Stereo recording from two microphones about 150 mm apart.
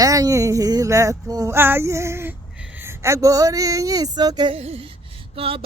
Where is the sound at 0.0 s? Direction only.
25° right (ahead or behind).